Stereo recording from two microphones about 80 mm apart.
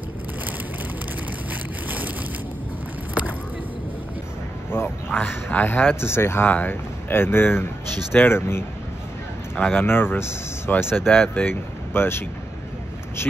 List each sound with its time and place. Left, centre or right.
4.6 s speech: left